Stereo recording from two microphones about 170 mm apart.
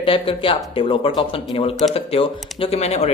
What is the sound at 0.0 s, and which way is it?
A man's voice, 30° left (ahead or behind).